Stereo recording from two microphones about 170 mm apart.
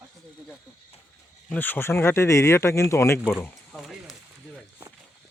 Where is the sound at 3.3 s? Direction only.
Centre (ahead or behind).